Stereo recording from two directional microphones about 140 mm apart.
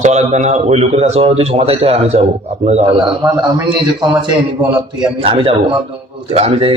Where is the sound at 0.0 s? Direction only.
55° right (ahead or behind).